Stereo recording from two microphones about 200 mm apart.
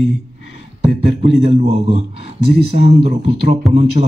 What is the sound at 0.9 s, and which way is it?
Speech, 30° right (ahead or behind).